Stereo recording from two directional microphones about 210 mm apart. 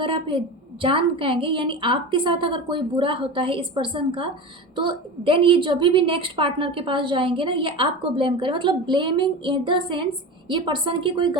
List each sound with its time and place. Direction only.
0.0 s a woman's voice: 25° right (ahead or behind)